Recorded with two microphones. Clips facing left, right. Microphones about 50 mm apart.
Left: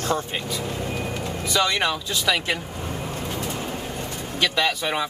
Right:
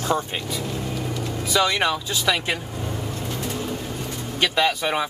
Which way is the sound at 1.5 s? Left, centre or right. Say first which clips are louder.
Right 2 dB; centre.